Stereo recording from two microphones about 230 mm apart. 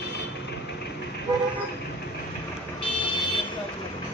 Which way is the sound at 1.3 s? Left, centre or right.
Centre.